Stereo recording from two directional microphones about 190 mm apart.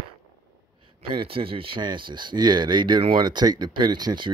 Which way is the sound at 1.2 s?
30° right (ahead or behind).